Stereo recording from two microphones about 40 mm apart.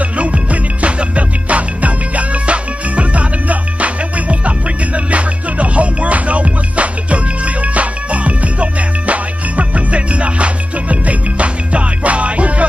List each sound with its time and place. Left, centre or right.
0.2 s music: right